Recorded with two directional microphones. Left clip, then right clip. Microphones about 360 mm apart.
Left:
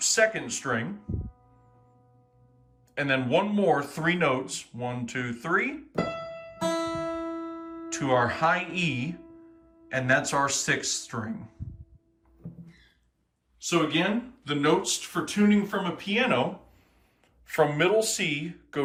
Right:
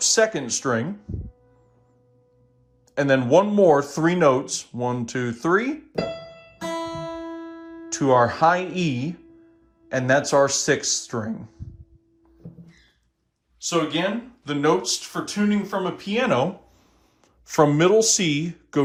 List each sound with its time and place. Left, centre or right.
0.0 s speech: centre
2.9 s speech: centre
6.9 s music: centre
7.9 s speech: centre
13.6 s speech: centre
17.4 s speech: centre